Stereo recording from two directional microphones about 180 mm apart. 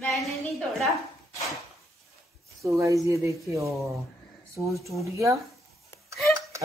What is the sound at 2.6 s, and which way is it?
Speech, 15° right (ahead or behind).